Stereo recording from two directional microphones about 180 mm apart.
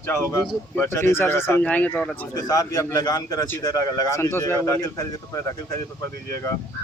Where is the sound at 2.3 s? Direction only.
20° left (ahead or behind).